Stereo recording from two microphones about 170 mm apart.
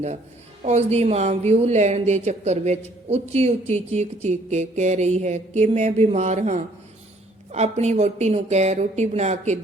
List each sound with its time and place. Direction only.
0.6 s speech: 40° right (ahead or behind)